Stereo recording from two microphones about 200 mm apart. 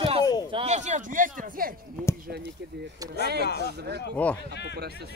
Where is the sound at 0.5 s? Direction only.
30° right (ahead or behind); by 1.8 s 45° right (ahead or behind).